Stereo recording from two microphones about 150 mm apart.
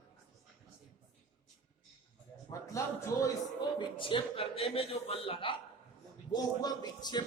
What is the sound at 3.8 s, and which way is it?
A man's voice, 35° left (ahead or behind).